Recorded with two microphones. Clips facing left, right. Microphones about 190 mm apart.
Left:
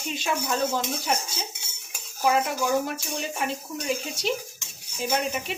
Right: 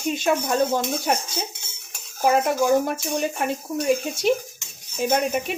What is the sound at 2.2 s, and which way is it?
Cutlery, 50° right (ahead or behind).